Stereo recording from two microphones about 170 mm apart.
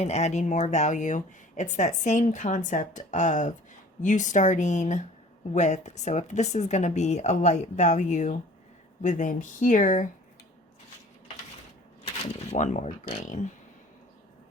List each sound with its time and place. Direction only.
0.0 s speech: 40° left (ahead or behind)
12.5 s speech: 45° left (ahead or behind)